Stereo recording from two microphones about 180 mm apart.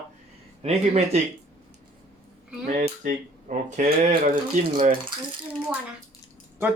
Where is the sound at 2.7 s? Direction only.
45° right (ahead or behind).